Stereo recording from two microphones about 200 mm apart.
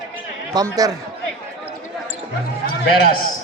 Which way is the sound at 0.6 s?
15° right (ahead or behind).